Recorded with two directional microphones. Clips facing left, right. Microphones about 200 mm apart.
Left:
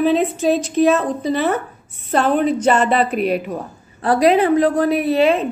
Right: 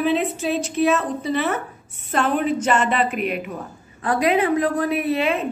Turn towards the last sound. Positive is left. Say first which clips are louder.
# left 6 dB
turn(degrees=35)  # may be behind; listen again after turning